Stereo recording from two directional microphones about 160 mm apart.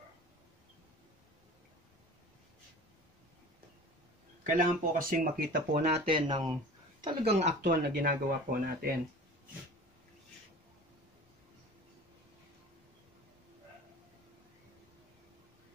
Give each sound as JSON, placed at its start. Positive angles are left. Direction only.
{"t": 4.5, "sound": "speech", "side_deg": -60}
{"t": 6.0, "sound": "speech", "side_deg": -30}
{"t": 7.6, "sound": "speech", "side_deg": -60}